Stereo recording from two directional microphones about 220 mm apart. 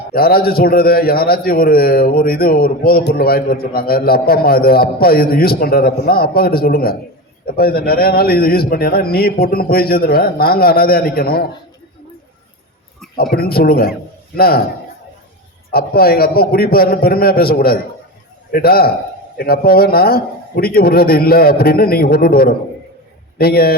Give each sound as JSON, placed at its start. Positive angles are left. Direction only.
{"t": 0.1, "sound": "a man's voice", "side_deg": 45}
{"t": 13.3, "sound": "a man's voice", "side_deg": 45}
{"t": 15.7, "sound": "a man's voice", "side_deg": 45}